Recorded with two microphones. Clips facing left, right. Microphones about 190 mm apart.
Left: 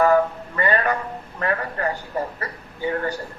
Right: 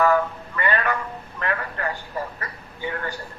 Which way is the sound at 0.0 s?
35° left (ahead or behind).